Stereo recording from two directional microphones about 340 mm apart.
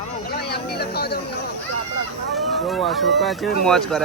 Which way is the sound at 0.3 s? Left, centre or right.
Left.